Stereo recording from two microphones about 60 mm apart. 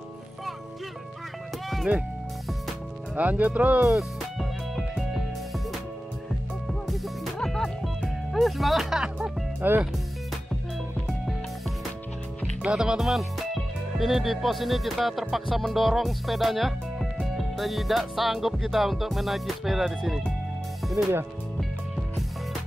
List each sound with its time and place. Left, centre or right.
3.2 s speech: right
3.8 s music: centre
6.7 s music: centre
8.0 s speech: centre
9.6 s speech: right
12.6 s speech: centre
17.4 s music: centre
19.8 s speech: centre
21.0 s speech: right